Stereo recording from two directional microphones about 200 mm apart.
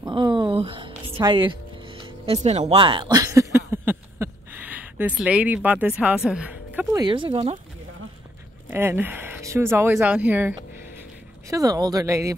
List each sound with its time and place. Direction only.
0.0 s music: 25° right (ahead or behind)
7.0 s speech: 25° right (ahead or behind)
8.6 s speech: 10° right (ahead or behind)
11.5 s speech: 20° right (ahead or behind)